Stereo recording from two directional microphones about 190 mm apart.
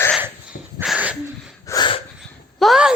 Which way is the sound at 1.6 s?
20° left (ahead or behind).